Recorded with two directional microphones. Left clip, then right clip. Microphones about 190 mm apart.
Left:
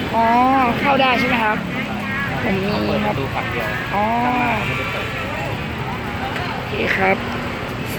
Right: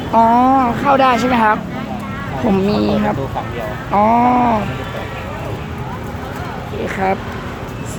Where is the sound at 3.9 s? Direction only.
30° right (ahead or behind).